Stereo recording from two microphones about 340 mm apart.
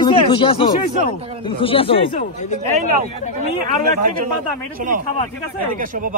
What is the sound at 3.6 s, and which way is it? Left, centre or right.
A man's voice, right.